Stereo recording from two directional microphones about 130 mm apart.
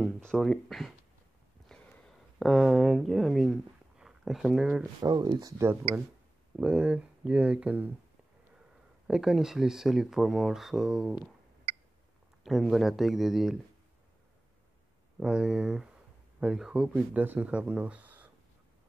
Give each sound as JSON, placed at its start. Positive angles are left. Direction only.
{"t": 0.0, "sound": "speech", "side_deg": 5}
{"t": 1.7, "sound": "a sound", "side_deg": 5}
{"t": 5.0, "sound": "speech", "side_deg": -30}
{"t": 6.5, "sound": "speech", "side_deg": -10}
{"t": 9.0, "sound": "speech", "side_deg": -5}
{"t": 12.4, "sound": "speech", "side_deg": 0}
{"t": 15.1, "sound": "speech", "side_deg": -5}